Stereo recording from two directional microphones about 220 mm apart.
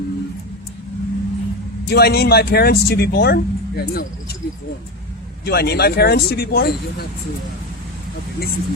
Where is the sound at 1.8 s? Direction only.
45° left (ahead or behind).